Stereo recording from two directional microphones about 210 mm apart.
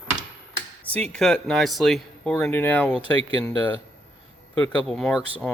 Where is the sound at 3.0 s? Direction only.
25° right (ahead or behind).